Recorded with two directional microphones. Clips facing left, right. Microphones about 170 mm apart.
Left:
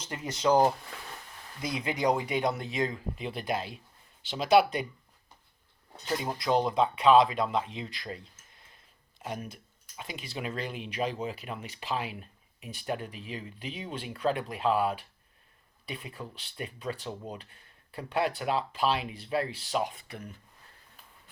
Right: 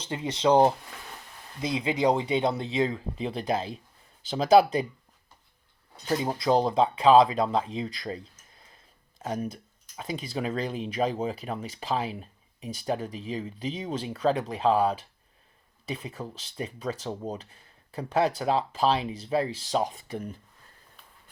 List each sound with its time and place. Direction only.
0.0 s speech: 25° right (ahead or behind)
6.2 s speech: 30° right (ahead or behind)
16.2 s speech: 35° right (ahead or behind)